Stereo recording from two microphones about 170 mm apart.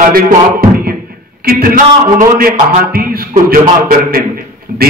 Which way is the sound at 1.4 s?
60° right (ahead or behind).